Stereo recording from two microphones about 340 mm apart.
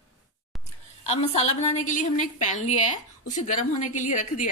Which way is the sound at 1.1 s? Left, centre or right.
Centre.